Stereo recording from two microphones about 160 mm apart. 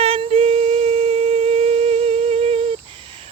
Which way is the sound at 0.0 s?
35° right (ahead or behind).